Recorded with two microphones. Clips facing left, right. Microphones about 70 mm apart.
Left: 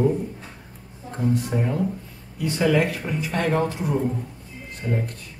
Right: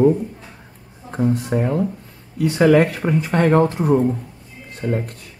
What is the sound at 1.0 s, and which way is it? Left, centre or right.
Speech, right.